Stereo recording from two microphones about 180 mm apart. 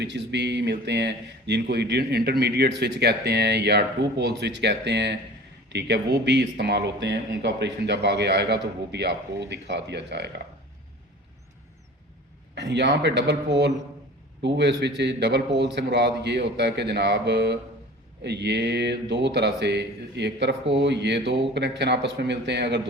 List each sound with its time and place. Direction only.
0.0 s speech: 70° right (ahead or behind)
12.5 s speech: 75° right (ahead or behind)